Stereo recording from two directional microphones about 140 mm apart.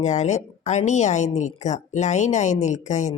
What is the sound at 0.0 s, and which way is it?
Speech, 55° left (ahead or behind).